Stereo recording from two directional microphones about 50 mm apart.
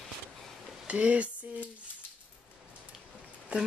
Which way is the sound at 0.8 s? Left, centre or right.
Right.